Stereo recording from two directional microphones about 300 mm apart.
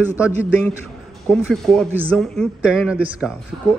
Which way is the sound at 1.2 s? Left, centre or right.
Centre.